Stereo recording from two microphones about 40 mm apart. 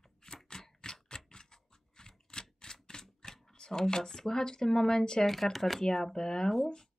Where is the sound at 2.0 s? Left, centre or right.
Centre.